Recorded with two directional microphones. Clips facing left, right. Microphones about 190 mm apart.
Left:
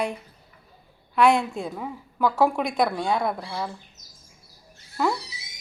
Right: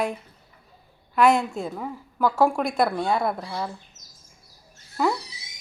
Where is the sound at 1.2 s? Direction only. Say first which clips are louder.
Even; centre (ahead or behind).